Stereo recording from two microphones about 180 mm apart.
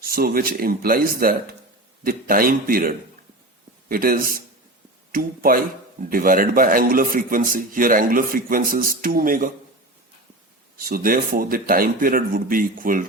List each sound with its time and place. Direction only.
0.0 s a man's voice: 55° right (ahead or behind)
10.8 s a man's voice: 55° right (ahead or behind)